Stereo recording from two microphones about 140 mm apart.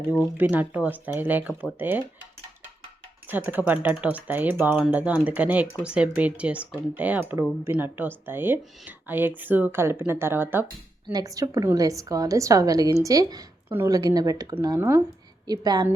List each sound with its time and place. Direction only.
0.3 s speech: 15° right (ahead or behind)
3.2 s a woman's voice: 15° right (ahead or behind)
15.4 s a woman's voice: 30° right (ahead or behind)